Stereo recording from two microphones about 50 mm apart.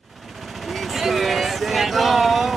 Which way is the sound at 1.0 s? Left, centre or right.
Centre.